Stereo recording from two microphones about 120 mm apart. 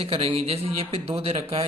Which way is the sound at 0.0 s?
55° right (ahead or behind).